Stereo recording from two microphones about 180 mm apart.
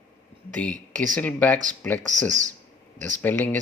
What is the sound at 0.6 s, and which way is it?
Speech, 5° left (ahead or behind).